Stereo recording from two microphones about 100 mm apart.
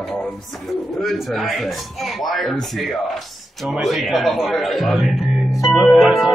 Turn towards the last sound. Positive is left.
turn(degrees=0)  # may be behind; listen again after turning